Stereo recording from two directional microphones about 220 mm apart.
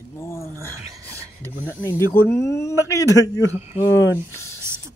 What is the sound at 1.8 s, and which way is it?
Speech, 10° left (ahead or behind).